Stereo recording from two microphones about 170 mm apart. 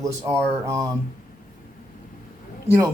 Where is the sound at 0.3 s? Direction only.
20° right (ahead or behind).